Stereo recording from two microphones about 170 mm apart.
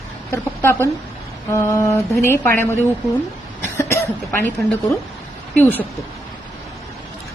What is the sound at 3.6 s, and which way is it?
A woman's voice, 15° left (ahead or behind).